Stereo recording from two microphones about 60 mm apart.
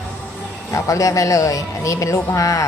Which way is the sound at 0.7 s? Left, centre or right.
Left.